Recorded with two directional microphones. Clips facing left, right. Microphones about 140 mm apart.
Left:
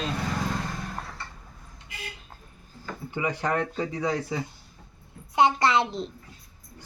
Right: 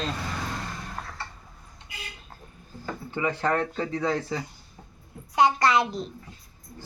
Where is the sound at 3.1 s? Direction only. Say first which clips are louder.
Right 1 dB; 15° left (ahead or behind).